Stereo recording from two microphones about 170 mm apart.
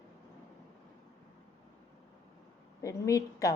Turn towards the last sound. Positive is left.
turn(degrees=20)  # may be behind; listen again after turning